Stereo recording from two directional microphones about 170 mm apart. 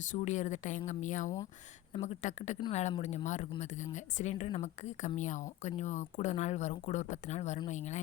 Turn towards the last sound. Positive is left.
turn(degrees=45)  # may be behind; listen again after turning